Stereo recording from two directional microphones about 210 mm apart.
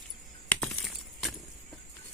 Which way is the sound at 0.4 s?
5° left (ahead or behind).